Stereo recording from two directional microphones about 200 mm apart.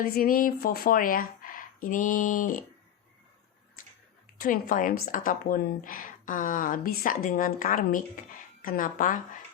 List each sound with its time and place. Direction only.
0.0 s speech: 45° left (ahead or behind)
4.4 s speech: 45° left (ahead or behind)